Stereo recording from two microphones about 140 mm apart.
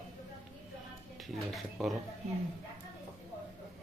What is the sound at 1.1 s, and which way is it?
Speech, centre (ahead or behind).